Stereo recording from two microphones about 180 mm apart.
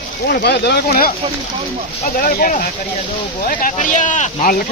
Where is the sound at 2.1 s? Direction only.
55° left (ahead or behind).